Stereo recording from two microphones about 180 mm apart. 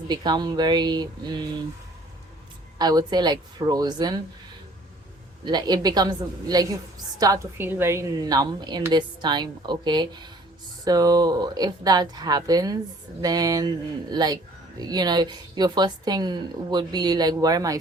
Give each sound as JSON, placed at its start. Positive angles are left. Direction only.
{"t": 0.1, "sound": "a woman's voice", "side_deg": -25}
{"t": 2.7, "sound": "a woman's voice", "side_deg": -20}
{"t": 5.5, "sound": "a woman's voice", "side_deg": -25}